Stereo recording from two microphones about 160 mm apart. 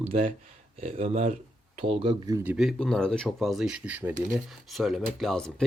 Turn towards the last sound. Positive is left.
turn(degrees=5)  # may be behind; listen again after turning